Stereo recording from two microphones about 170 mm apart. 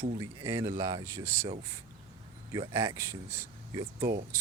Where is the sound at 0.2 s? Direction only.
20° right (ahead or behind).